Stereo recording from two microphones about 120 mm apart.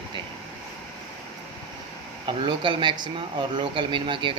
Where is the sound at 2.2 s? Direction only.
40° right (ahead or behind).